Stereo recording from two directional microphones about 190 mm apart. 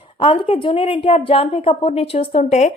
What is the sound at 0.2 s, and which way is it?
A woman's voice, 30° left (ahead or behind).